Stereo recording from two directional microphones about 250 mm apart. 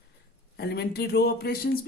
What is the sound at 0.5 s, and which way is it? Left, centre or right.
Speech, left.